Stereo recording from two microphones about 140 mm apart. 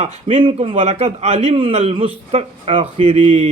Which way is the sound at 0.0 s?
40° right (ahead or behind).